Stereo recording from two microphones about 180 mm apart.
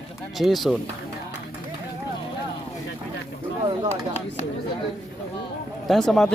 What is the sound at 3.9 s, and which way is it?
Speech, 35° left (ahead or behind).